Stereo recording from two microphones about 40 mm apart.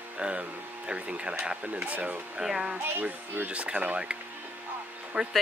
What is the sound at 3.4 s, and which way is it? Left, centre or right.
Speech, right.